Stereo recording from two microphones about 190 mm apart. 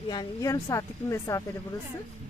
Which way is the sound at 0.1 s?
20° left (ahead or behind).